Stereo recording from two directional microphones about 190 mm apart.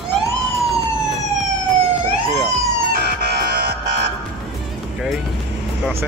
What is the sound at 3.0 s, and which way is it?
Music, 60° right (ahead or behind).